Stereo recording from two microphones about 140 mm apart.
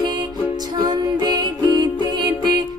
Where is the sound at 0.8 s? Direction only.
30° right (ahead or behind).